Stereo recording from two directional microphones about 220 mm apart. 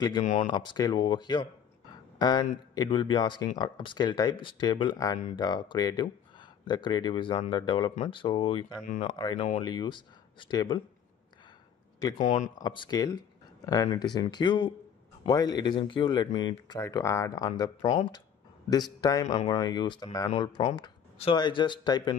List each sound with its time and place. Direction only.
0.2 s speech: 30° left (ahead or behind)
0.5 s speech: 20° left (ahead or behind)
12.0 s speech: 20° left (ahead or behind)
17.8 s speech: 30° left (ahead or behind)
18.7 s speech: 15° left (ahead or behind)